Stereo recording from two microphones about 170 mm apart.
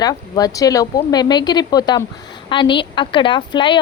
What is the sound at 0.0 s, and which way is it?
A woman's voice, 20° left (ahead or behind).